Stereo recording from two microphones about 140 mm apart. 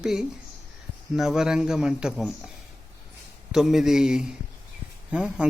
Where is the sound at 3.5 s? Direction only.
5° right (ahead or behind).